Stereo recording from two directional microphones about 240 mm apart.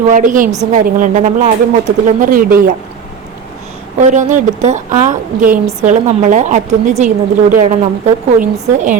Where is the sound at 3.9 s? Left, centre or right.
Right.